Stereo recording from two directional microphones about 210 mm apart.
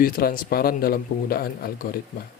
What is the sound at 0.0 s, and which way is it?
Speech, 45° left (ahead or behind).